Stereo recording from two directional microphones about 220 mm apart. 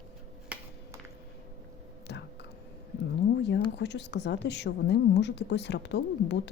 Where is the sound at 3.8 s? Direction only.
50° left (ahead or behind).